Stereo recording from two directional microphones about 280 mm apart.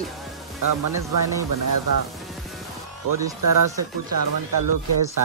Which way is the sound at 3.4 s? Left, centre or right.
Right.